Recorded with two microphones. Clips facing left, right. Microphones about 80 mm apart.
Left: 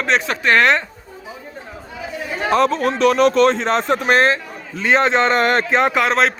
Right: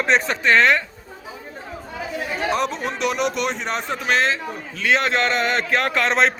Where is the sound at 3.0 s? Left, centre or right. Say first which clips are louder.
Left 8 dB; left.